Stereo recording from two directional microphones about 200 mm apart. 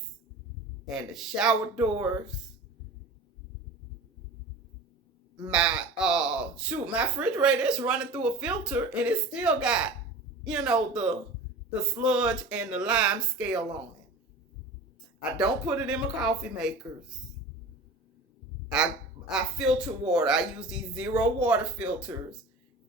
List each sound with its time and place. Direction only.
0.9 s speech: centre (ahead or behind)
5.5 s speech: 5° right (ahead or behind)
15.2 s speech: 5° right (ahead or behind)
18.7 s speech: 5° right (ahead or behind)